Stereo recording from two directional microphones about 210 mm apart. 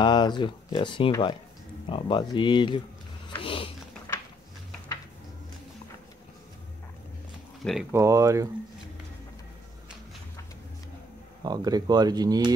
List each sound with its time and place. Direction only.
0.0 s speech: 20° left (ahead or behind)
3.3 s a sound: 25° left (ahead or behind)
7.9 s speech: 15° right (ahead or behind)
11.4 s speech: 20° right (ahead or behind)